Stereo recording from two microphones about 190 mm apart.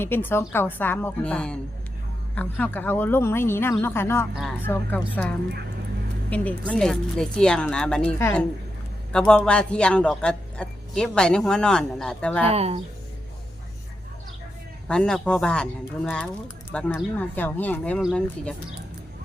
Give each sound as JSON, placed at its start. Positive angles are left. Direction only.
{"t": 0.0, "sound": "speech", "side_deg": 10}
{"t": 6.3, "sound": "a man's voice", "side_deg": 5}
{"t": 12.5, "sound": "speech", "side_deg": -30}
{"t": 14.8, "sound": "a man's voice", "side_deg": 5}